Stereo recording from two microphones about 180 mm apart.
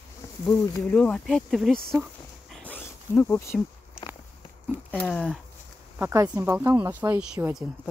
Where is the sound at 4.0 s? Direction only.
5° right (ahead or behind).